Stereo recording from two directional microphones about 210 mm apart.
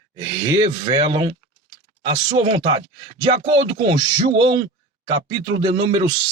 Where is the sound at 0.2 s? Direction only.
25° right (ahead or behind).